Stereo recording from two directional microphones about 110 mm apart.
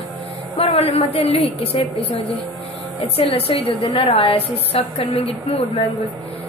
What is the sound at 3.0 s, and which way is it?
A woman's voice, 60° left (ahead or behind).